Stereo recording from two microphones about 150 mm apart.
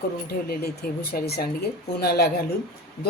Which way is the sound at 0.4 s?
90° left.